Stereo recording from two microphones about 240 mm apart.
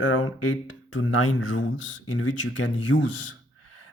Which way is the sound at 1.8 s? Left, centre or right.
Left.